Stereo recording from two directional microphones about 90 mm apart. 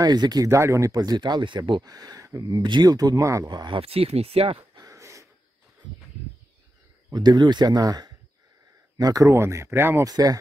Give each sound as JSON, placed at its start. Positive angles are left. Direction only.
{"t": 0.0, "sound": "speech", "side_deg": -50}
{"t": 0.5, "sound": "speech", "side_deg": -35}
{"t": 2.5, "sound": "speech", "side_deg": -60}
{"t": 3.4, "sound": "speech", "side_deg": -55}
{"t": 4.7, "sound": "a sound", "side_deg": -40}
{"t": 7.1, "sound": "speech", "side_deg": -50}
{"t": 10.0, "sound": "speech", "side_deg": -45}